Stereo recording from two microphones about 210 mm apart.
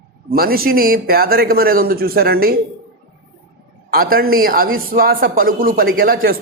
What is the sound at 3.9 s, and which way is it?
A man's voice, 45° right (ahead or behind).